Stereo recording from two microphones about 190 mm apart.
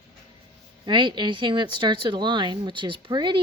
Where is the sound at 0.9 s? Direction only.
25° right (ahead or behind).